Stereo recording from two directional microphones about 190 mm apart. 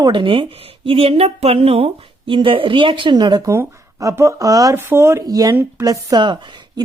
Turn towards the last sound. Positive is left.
turn(degrees=-25)  # may be behind; listen again after turning